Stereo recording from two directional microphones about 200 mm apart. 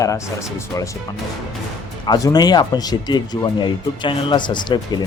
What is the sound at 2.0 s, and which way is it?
Speech, 20° left (ahead or behind).